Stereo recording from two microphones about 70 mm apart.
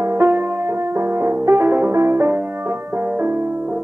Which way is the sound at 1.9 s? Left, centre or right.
Right.